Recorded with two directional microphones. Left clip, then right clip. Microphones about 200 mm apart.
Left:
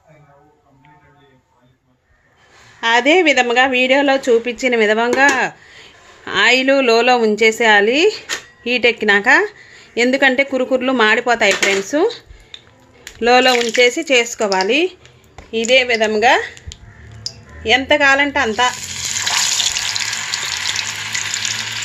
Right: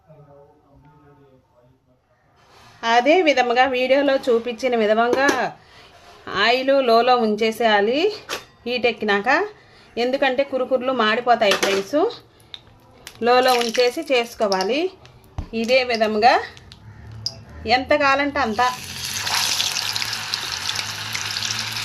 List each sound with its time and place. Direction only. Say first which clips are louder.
2.8 s a woman's voice: left 3 dB; 15° left (ahead or behind)
17.2 s sizzle: left 5 dB; 10° left (ahead or behind)